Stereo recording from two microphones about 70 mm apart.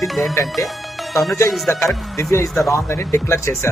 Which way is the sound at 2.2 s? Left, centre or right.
Left.